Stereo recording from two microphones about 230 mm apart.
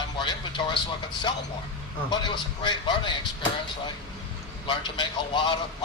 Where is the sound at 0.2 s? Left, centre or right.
Left.